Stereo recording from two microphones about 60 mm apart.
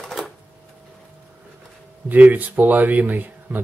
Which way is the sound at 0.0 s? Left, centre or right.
Centre.